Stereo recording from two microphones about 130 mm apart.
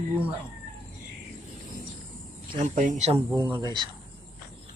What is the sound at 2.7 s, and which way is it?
Speech, 80° right.